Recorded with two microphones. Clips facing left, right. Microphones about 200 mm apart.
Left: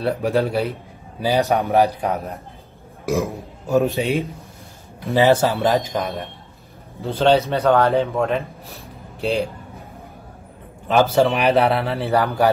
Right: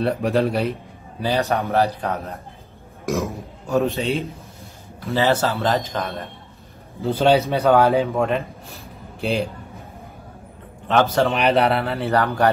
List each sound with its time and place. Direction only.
0.0 s speech: centre (ahead or behind)
1.2 s a man's voice: 15° left (ahead or behind)
7.0 s speech: centre (ahead or behind)
10.9 s speech: 10° left (ahead or behind)
12.1 s a man's voice: 15° left (ahead or behind)